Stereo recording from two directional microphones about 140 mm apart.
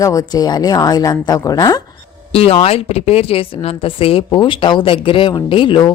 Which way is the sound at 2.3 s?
45° left (ahead or behind).